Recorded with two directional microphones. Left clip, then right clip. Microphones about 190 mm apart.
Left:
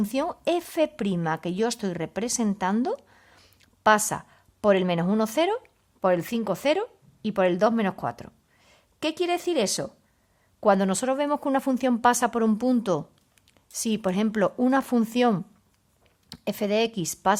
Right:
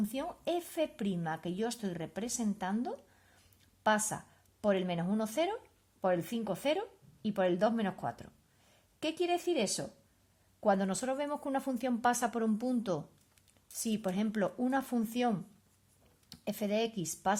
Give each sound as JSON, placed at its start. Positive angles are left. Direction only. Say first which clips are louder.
{"t": 0.0, "sound": "a woman's voice", "louder": "left 11 dB", "side_deg": 30}
{"t": 3.6, "sound": "a sound", "louder": "left 10 dB", "side_deg": 25}
{"t": 4.6, "sound": "speech", "louder": "left 10 dB", "side_deg": 30}